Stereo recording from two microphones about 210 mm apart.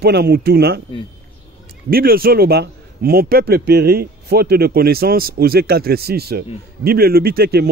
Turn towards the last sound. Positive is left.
turn(degrees=-50)  # may be behind; listen again after turning